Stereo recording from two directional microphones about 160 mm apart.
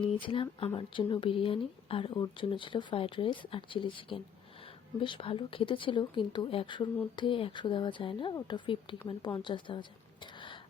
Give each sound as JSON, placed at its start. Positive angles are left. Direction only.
{"t": 0.0, "sound": "a woman's voice", "side_deg": 30}